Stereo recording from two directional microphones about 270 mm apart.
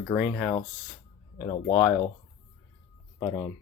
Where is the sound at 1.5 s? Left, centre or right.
Centre.